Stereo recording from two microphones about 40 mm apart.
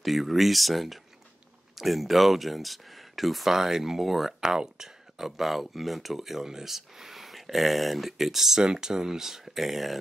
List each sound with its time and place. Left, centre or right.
0.0 s speech: centre